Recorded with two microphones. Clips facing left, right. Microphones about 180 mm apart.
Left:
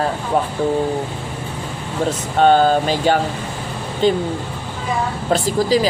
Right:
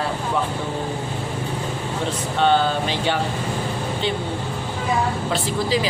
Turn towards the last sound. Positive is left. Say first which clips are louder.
# left 5 dB
turn(degrees=40)  # may be behind; listen again after turning